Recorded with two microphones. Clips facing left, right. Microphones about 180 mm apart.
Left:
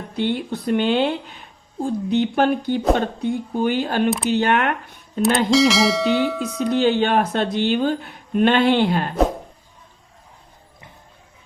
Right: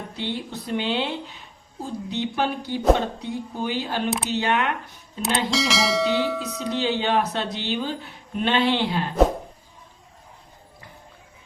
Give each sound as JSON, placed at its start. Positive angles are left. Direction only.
{"t": 0.2, "sound": "a woman's voice", "side_deg": 55}
{"t": 5.2, "sound": "speech", "side_deg": 0}
{"t": 6.7, "sound": "a woman's voice", "side_deg": 50}